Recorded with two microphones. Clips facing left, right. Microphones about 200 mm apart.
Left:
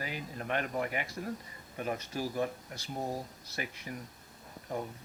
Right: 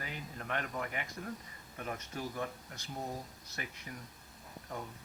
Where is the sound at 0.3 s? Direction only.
25° left (ahead or behind).